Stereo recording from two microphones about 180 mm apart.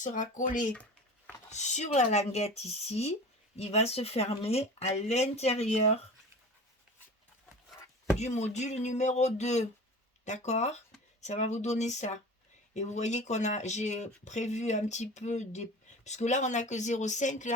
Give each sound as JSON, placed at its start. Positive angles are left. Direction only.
{"t": 0.0, "sound": "speech", "side_deg": 45}
{"t": 8.2, "sound": "speech", "side_deg": 40}